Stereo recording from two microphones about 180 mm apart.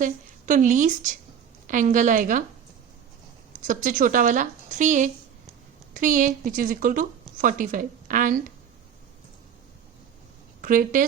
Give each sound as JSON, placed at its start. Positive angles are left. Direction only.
{"t": 0.0, "sound": "a woman's voice", "side_deg": -45}
{"t": 3.7, "sound": "a woman's voice", "side_deg": -50}
{"t": 10.6, "sound": "a woman's voice", "side_deg": -50}